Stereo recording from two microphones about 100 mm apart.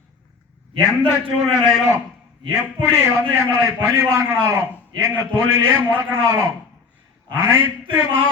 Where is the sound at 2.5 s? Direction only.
25° right (ahead or behind).